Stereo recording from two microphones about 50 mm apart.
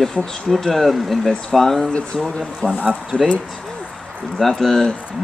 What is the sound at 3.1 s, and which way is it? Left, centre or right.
Speech, left.